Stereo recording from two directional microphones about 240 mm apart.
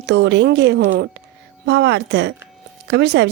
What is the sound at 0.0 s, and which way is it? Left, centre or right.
Speech, right.